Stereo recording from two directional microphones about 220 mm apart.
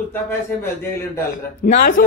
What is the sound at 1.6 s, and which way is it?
Speech, 45° left (ahead or behind).